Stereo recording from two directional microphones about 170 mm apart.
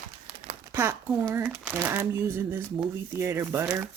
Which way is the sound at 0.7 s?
15° right (ahead or behind).